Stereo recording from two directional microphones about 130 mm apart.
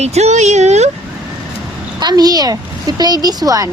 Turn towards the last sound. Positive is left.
turn(degrees=-30)  # may be behind; listen again after turning